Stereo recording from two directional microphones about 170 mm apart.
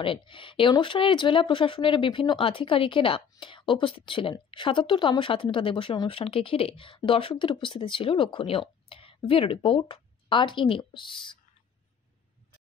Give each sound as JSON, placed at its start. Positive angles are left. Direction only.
{"t": 0.0, "sound": "speech", "side_deg": 30}